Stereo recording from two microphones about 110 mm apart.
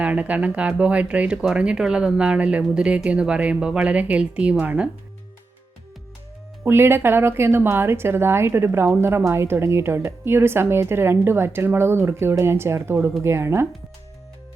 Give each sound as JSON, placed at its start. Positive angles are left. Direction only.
{"t": 0.0, "sound": "speech", "side_deg": -10}
{"t": 6.7, "sound": "speech", "side_deg": -20}